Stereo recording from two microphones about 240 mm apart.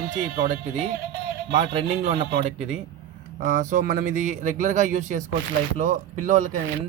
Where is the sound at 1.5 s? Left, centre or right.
Right.